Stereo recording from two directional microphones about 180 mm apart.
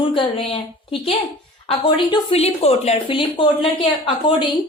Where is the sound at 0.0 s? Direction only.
30° left (ahead or behind).